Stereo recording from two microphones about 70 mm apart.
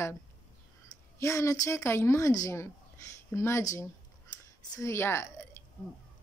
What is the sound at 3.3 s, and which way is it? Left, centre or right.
Speech, left.